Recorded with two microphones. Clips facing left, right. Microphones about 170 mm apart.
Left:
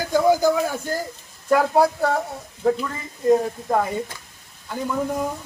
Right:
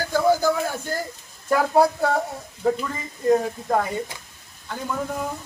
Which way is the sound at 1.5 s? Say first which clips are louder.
Left 1 dB; centre (ahead or behind).